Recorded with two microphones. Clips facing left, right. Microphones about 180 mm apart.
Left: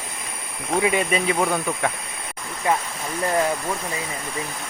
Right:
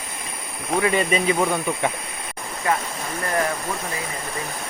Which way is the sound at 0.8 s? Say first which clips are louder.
Right 1 dB; 5° left (ahead or behind).